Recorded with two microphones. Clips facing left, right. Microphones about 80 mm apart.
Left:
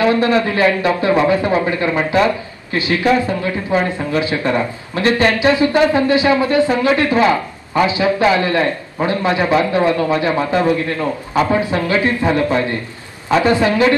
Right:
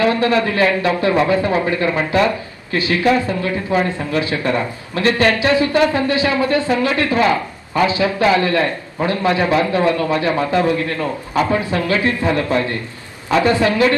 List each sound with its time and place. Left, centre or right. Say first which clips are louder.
0.0 s a man's voice: left 1 dB; left